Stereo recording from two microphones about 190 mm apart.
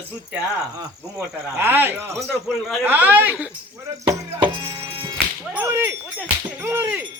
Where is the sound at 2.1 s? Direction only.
Centre (ahead or behind).